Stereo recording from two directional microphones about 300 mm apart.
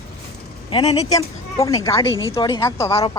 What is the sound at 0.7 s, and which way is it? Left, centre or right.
Speech, centre.